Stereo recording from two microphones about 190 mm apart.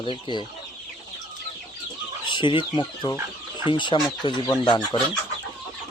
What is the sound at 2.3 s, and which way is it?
Speech, 25° left (ahead or behind).